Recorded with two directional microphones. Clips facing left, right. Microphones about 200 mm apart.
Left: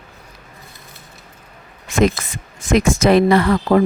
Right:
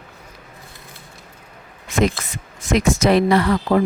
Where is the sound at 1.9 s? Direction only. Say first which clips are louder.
Left 3 dB; 50° left (ahead or behind).